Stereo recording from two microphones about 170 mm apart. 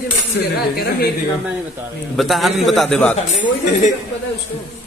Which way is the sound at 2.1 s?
Centre (ahead or behind).